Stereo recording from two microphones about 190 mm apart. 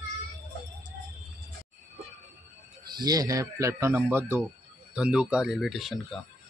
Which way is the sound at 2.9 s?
20° right (ahead or behind).